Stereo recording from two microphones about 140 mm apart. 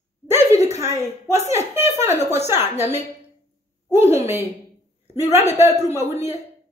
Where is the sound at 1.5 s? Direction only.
20° right (ahead or behind).